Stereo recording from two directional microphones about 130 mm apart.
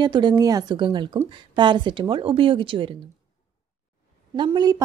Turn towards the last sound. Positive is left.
turn(degrees=-30)  # may be behind; listen again after turning